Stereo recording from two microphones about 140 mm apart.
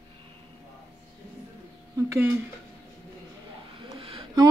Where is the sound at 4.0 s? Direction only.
35° right (ahead or behind).